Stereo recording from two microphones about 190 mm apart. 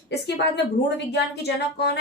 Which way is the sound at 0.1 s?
65° left (ahead or behind).